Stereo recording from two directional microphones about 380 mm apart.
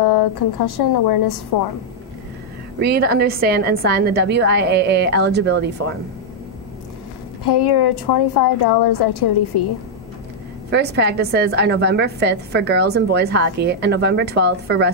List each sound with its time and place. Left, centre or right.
0.0 s a woman's voice: left
2.8 s a woman's voice: right
7.4 s a woman's voice: left
10.7 s a woman's voice: right